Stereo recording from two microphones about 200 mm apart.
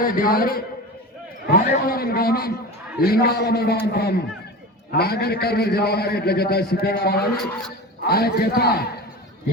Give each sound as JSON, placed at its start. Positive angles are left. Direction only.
{"t": 0.0, "sound": "a man's voice", "side_deg": 45}